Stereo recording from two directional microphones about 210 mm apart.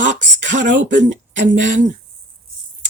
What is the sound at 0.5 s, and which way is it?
Speech, 40° right (ahead or behind).